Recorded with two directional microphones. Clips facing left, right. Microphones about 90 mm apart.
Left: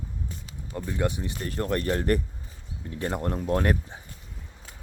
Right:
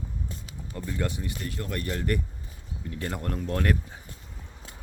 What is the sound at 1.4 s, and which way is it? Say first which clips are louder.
Speech: left 8 dB; 40° left (ahead or behind).